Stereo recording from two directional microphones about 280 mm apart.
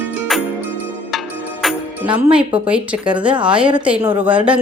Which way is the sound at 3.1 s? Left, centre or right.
Centre.